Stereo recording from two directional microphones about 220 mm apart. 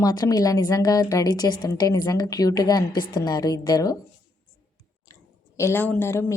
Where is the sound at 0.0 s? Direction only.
15° left (ahead or behind).